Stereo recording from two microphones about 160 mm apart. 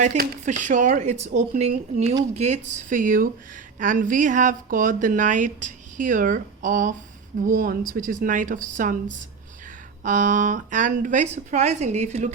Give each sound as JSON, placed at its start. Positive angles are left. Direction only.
{"t": 0.4, "sound": "speech", "side_deg": -50}
{"t": 10.0, "sound": "speech", "side_deg": -55}